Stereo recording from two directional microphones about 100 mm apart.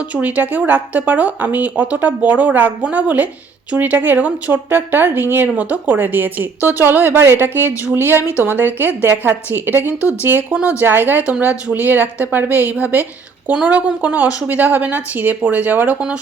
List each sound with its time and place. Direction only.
0.1 s speech: 15° right (ahead or behind)